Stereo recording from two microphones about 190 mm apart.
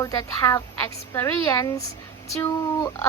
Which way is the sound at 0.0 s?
20° left (ahead or behind).